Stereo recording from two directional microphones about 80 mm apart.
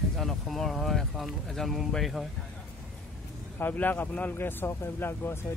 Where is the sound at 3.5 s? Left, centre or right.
Left.